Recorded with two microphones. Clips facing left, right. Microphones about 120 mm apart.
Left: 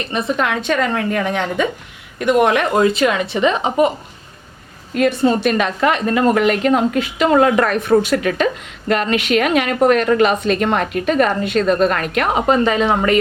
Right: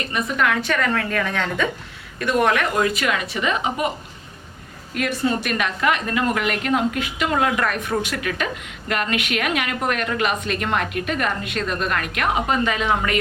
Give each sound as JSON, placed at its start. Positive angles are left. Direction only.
{"t": 0.1, "sound": "a woman's voice", "side_deg": 25}
{"t": 4.9, "sound": "a woman's voice", "side_deg": 25}